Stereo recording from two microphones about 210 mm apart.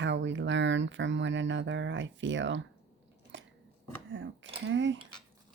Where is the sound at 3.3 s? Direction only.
60° right (ahead or behind).